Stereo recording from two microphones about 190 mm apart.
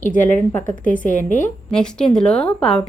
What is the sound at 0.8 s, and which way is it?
Speech, 45° left (ahead or behind).